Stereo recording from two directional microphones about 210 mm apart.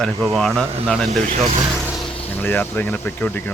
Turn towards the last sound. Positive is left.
turn(degrees=10)  # may be behind; listen again after turning